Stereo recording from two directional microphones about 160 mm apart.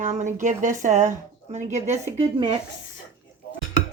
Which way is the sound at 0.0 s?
45° right (ahead or behind).